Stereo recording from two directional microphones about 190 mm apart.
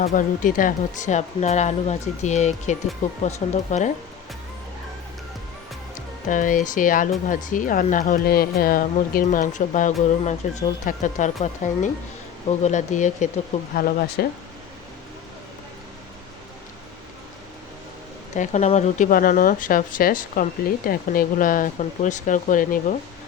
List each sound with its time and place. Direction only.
0.0 s speech: 45° left (ahead or behind)
6.2 s speech: 45° left (ahead or behind)
18.3 s speech: 40° left (ahead or behind)